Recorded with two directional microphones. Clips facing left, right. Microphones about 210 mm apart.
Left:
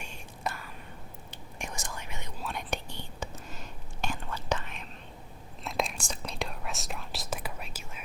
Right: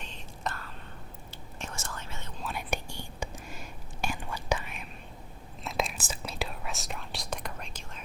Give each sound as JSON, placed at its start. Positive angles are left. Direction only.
{"t": 0.0, "sound": "whispering", "side_deg": 10}
{"t": 2.4, "sound": "whispering", "side_deg": -5}